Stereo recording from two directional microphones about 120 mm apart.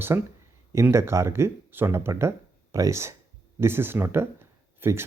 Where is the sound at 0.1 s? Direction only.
25° right (ahead or behind).